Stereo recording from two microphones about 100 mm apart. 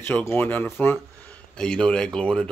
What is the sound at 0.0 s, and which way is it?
Speech, 25° left (ahead or behind).